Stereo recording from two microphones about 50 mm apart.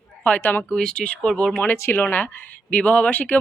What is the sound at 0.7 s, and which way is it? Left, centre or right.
Speech, centre.